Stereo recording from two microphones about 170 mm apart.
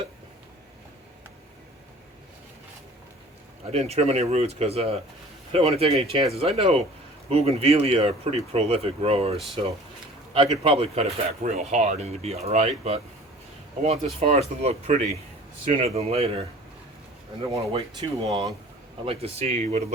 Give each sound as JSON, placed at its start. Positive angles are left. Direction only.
{"t": 3.7, "sound": "speech", "side_deg": -35}
{"t": 17.5, "sound": "speech", "side_deg": -35}
{"t": 18.3, "sound": "speech", "side_deg": -20}
{"t": 19.0, "sound": "speech", "side_deg": -35}